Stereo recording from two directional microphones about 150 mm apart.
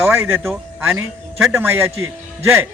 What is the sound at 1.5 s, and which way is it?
Speech, 20° right (ahead or behind).